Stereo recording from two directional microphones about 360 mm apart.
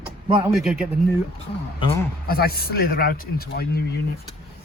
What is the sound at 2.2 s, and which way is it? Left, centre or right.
A man's voice, left.